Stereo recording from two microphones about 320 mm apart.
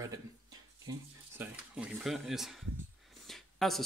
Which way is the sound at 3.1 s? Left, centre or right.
Centre.